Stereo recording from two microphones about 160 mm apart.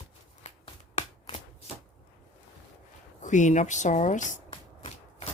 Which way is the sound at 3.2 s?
50° left (ahead or behind).